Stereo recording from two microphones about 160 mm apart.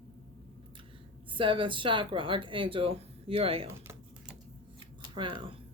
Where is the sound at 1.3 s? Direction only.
30° right (ahead or behind).